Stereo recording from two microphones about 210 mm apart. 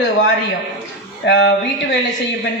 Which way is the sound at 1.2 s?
55° left (ahead or behind).